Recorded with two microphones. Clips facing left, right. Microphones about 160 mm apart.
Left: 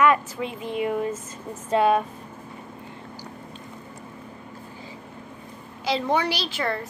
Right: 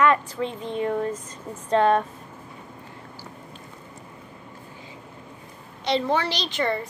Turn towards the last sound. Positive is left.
turn(degrees=0)  # may be behind; listen again after turning